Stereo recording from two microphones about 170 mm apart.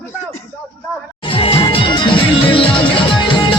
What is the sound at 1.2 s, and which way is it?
Music, 35° left (ahead or behind).